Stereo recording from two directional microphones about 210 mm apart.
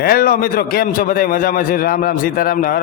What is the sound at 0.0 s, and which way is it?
A man's voice, 45° left (ahead or behind).